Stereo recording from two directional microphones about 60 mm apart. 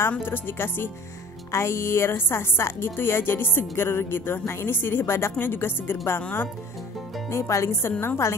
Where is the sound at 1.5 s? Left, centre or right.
Left.